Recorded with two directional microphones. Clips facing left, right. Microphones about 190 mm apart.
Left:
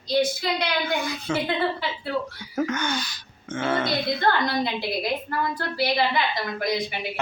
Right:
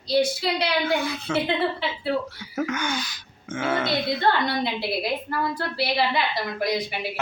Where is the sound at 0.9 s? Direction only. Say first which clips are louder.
Right 1 dB; centre (ahead or behind).